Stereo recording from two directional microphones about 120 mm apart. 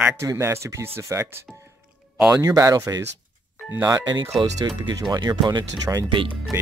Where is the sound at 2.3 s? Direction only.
30° right (ahead or behind).